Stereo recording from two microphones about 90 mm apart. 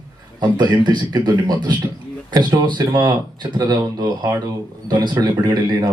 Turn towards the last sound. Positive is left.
turn(degrees=-50)  # may be behind; listen again after turning